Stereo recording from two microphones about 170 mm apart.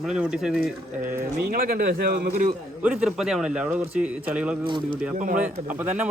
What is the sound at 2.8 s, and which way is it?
A man's voice, 5° right (ahead or behind).